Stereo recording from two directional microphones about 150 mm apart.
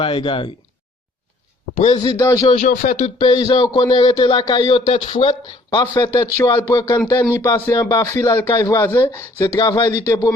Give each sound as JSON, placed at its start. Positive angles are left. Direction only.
{"t": 0.0, "sound": "speech", "side_deg": 35}
{"t": 1.7, "sound": "a man's voice", "side_deg": 50}
{"t": 2.0, "sound": "speech", "side_deg": 25}
{"t": 2.6, "sound": "speech", "side_deg": 55}
{"t": 3.2, "sound": "speech", "side_deg": 35}
{"t": 6.3, "sound": "speech", "side_deg": 25}